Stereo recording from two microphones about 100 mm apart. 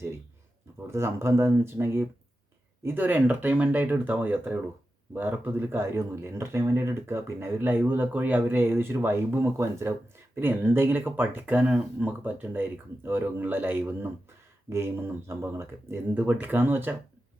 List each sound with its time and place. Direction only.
0.9 s speech: 25° right (ahead or behind)